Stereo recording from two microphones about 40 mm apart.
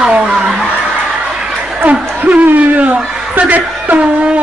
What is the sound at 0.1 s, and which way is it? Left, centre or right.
Snicker, right.